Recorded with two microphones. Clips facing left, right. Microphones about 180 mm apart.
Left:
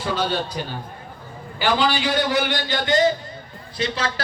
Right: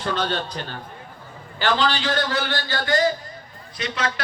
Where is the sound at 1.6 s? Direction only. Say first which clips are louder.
Left 1 dB; 10° left (ahead or behind).